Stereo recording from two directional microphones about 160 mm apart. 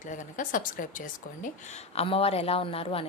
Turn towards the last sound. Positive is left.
turn(degrees=35)  # may be behind; listen again after turning